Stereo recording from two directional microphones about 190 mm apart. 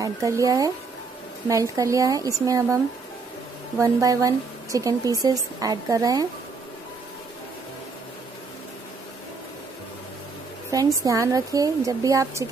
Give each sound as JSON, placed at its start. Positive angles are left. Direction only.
{"t": 0.0, "sound": "a woman's voice", "side_deg": -15}
{"t": 10.7, "sound": "a woman's voice", "side_deg": -15}